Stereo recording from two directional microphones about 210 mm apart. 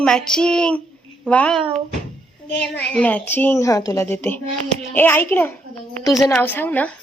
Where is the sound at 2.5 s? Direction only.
5° left (ahead or behind).